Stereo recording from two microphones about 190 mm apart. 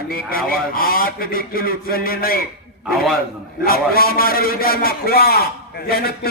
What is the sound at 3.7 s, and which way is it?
A man's voice, 50° left (ahead or behind).